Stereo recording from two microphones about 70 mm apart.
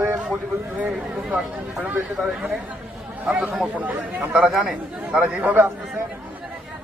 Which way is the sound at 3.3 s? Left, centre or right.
Right.